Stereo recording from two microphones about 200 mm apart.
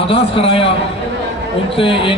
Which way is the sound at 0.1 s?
25° left (ahead or behind).